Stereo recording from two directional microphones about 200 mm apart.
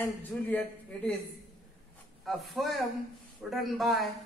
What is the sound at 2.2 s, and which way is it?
Speech, centre (ahead or behind).